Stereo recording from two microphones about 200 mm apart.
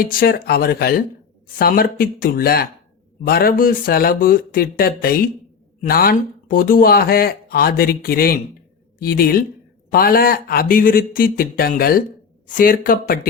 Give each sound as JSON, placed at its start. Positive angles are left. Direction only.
{"t": 0.0, "sound": "speech", "side_deg": 45}